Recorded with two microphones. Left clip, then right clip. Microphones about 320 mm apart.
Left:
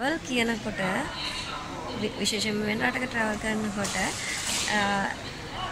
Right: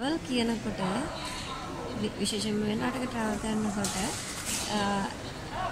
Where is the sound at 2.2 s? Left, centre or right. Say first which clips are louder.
Left 4 dB; centre.